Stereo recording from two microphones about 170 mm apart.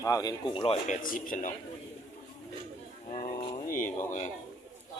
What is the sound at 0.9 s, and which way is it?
Speech, 55° left (ahead or behind).